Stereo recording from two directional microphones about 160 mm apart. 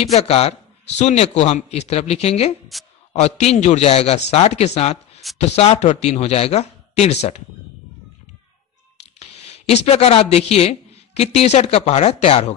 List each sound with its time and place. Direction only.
0.0 s a man's voice: 40° left (ahead or behind)
2.7 s speech: centre (ahead or behind)
3.1 s a man's voice: 40° left (ahead or behind)
9.2 s a man's voice: 40° left (ahead or behind)